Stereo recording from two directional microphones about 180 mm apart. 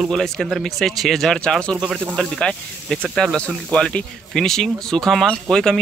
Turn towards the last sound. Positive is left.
turn(degrees=5)  # may be behind; listen again after turning